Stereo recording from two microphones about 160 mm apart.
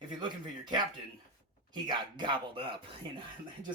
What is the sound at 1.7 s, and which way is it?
Speech, 30° right (ahead or behind).